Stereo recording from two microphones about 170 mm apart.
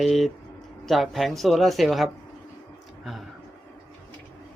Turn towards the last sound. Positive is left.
turn(degrees=0)  # may be behind; listen again after turning